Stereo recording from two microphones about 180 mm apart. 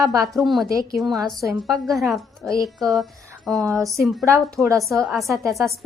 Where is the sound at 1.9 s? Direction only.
Centre (ahead or behind).